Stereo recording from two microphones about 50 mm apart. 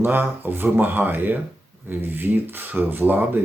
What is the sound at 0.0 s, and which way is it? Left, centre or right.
Speech, right.